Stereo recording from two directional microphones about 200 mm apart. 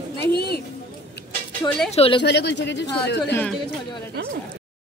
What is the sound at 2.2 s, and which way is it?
Speech, 60° left (ahead or behind).